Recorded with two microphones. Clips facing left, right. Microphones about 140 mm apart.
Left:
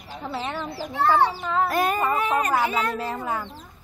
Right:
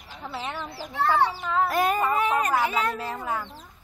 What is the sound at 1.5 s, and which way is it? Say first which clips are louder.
Speech: left 1 dB; 5° right (ahead or behind).